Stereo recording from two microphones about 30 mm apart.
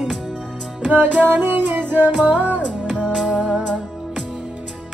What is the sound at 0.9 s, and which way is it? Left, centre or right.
Music, right.